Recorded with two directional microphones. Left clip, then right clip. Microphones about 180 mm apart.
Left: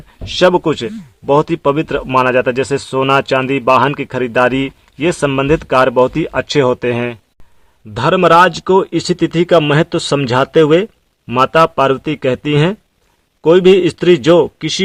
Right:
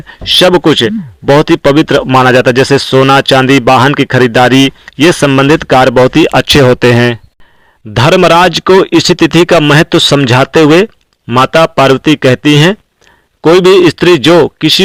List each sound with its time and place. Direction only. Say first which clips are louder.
0.3 s speech: right 6 dB; 25° right (ahead or behind)
6.3 s speech: right 8 dB; 35° right (ahead or behind)
7.9 s speech: right 4 dB; 30° right (ahead or behind)